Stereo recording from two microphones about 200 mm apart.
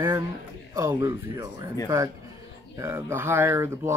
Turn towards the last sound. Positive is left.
turn(degrees=-10)  # may be behind; listen again after turning